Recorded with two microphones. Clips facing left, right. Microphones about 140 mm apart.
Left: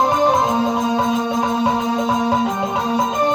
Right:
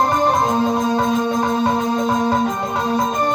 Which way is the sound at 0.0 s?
10° left (ahead or behind).